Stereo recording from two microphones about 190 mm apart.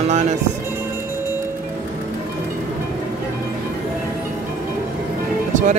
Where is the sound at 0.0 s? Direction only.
35° right (ahead or behind).